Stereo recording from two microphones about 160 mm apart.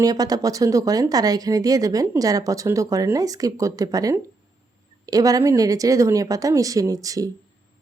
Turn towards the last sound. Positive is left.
turn(degrees=-20)  # may be behind; listen again after turning